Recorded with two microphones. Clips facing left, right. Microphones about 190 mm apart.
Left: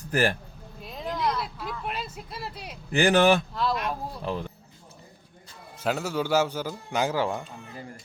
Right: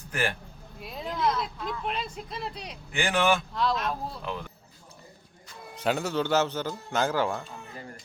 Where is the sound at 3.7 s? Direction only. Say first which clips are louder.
Even; 15° left (ahead or behind).